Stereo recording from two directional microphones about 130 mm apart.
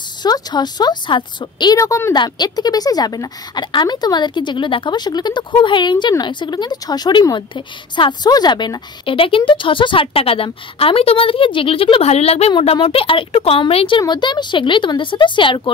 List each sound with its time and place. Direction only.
0.2 s speech: 35° left (ahead or behind)
2.1 s speech: 35° left (ahead or behind)